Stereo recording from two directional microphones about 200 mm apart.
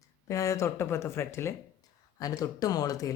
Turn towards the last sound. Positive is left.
turn(degrees=15)  # may be behind; listen again after turning